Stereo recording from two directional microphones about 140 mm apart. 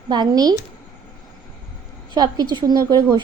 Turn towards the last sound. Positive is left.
turn(degrees=-30)  # may be behind; listen again after turning